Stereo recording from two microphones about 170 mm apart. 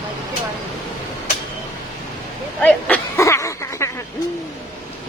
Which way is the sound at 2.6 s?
5° left (ahead or behind).